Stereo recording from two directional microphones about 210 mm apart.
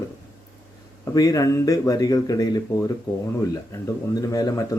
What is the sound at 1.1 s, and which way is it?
Speech, 15° left (ahead or behind).